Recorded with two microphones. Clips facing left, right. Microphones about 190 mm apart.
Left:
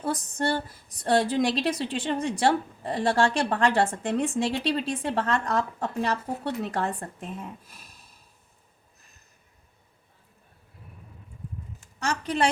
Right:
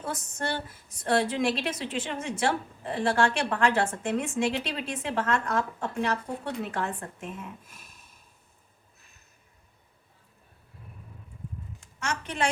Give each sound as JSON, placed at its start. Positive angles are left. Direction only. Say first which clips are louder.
{"t": 0.0, "sound": "a woman's voice", "louder": "left 5 dB", "side_deg": 35}
{"t": 11.9, "sound": "a woman's voice", "louder": "left 5 dB", "side_deg": 35}